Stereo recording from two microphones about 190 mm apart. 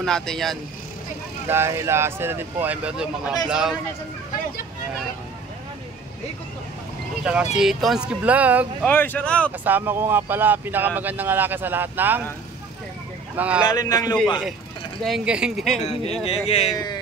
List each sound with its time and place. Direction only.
0.0 s speech: centre (ahead or behind)
1.5 s speech: 15° right (ahead or behind)
7.5 s speech: centre (ahead or behind)
8.8 s speech: 10° left (ahead or behind)
9.7 s speech: 10° right (ahead or behind)
13.4 s speech: 5° right (ahead or behind)
13.7 s a man's voice: 20° left (ahead or behind)
15.0 s speech: 5° right (ahead or behind)
15.8 s speech: 30° left (ahead or behind)
16.7 s speech: 20° left (ahead or behind)